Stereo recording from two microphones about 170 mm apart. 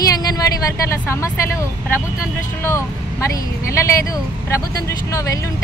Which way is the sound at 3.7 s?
15° left (ahead or behind).